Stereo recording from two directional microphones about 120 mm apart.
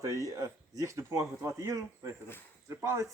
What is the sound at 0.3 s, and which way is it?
Speech, 30° right (ahead or behind).